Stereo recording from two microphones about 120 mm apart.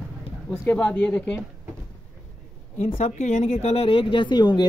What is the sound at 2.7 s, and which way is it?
Speech, 75° left (ahead or behind).